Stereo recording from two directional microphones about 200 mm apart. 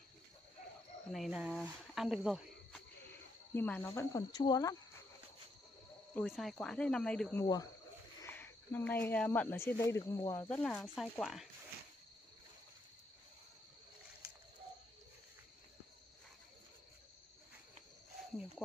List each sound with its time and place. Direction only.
1.1 s speech: centre (ahead or behind)
3.5 s speech: 10° left (ahead or behind)
6.1 s speech: centre (ahead or behind)